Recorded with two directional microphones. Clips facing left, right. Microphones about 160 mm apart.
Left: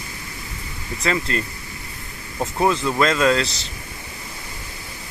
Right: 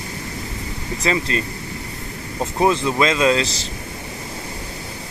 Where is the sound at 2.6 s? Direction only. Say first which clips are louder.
Right 1 dB; 15° right (ahead or behind).